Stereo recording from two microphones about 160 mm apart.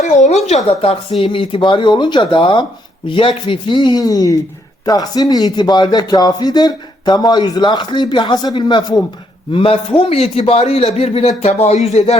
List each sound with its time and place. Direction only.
0.0 s a man's voice: 45° left (ahead or behind)